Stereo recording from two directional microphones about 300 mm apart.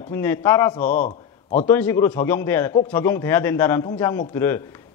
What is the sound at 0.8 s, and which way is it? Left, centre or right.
Speech, left.